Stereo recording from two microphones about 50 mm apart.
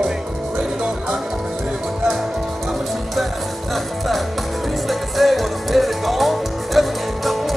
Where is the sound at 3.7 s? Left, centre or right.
Centre.